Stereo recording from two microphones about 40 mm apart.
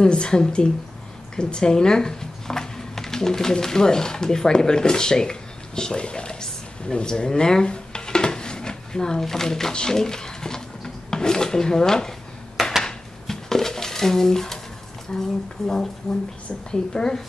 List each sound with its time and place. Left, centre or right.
0.0 s speech: left
12.8 s a sound: centre
15.1 s speech: centre